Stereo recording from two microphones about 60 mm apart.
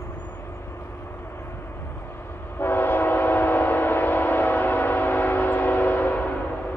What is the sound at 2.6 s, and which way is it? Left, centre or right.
Train, left.